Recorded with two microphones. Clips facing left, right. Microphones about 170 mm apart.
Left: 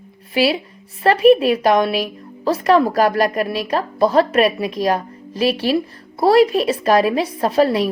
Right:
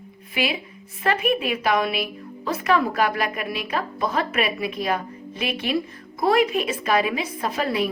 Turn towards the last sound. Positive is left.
turn(degrees=35)  # may be behind; listen again after turning